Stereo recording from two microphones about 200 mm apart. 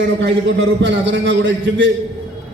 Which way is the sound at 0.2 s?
65° right (ahead or behind).